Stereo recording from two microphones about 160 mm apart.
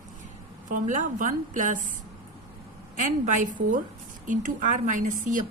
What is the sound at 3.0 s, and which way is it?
Speech, 50° right (ahead or behind).